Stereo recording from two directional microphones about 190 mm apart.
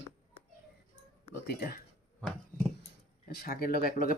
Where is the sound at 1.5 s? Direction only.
55° left (ahead or behind).